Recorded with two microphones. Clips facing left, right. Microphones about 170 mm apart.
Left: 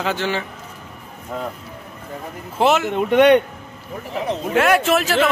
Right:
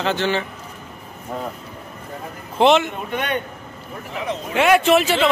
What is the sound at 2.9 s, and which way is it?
Speech, 75° left (ahead or behind).